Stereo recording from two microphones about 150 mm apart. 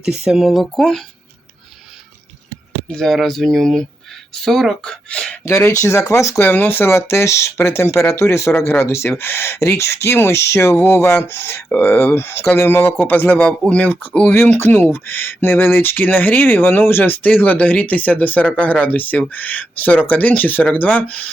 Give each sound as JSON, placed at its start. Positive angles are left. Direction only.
{"t": 0.3, "sound": "speech", "side_deg": 0}
{"t": 2.9, "sound": "speech", "side_deg": 0}